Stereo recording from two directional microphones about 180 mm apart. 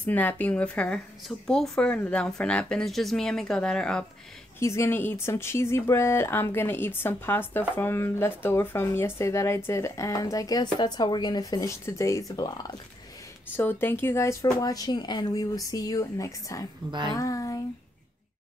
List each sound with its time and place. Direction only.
0.0 s a woman's voice: 10° left (ahead or behind)
4.6 s speech: 15° left (ahead or behind)
13.6 s speech: 10° left (ahead or behind)
17.1 s a sound: 20° left (ahead or behind)